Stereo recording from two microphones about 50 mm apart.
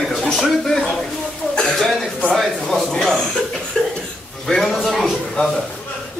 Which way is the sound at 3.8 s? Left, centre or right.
Centre.